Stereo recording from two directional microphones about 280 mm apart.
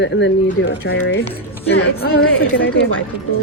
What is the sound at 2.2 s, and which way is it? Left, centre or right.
Speech, left.